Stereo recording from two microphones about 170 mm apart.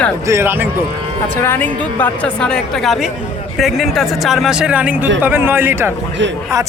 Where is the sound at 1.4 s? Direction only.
10° left (ahead or behind); by 5.9 s 15° right (ahead or behind).